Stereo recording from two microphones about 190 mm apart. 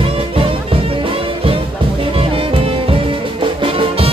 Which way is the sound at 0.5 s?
30° right (ahead or behind).